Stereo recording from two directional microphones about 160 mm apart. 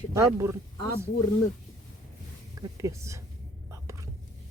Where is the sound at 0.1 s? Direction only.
20° right (ahead or behind).